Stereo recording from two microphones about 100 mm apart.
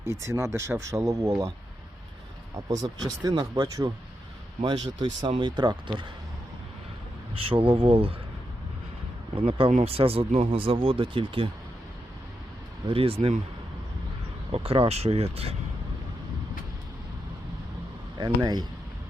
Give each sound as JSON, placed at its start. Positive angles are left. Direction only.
{"t": 0.0, "sound": "speech", "side_deg": -30}
{"t": 2.6, "sound": "speech", "side_deg": -35}
{"t": 4.6, "sound": "speech", "side_deg": -55}
{"t": 7.3, "sound": "speech", "side_deg": -65}
{"t": 9.3, "sound": "speech", "side_deg": -70}
{"t": 12.9, "sound": "speech", "side_deg": -70}
{"t": 14.5, "sound": "speech", "side_deg": -75}
{"t": 18.2, "sound": "speech", "side_deg": -45}